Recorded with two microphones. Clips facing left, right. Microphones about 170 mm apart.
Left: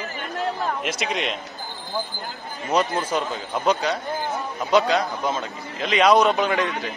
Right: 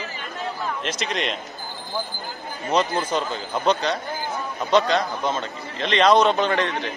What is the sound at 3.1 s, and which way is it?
A man's voice, 5° left (ahead or behind).